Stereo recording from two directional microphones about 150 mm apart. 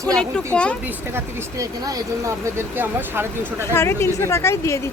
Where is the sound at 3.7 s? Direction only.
15° left (ahead or behind).